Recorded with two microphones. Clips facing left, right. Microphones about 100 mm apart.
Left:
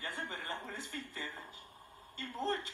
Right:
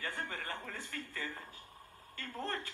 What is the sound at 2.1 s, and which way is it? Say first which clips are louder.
Speech: left 4 dB; 25° left (ahead or behind).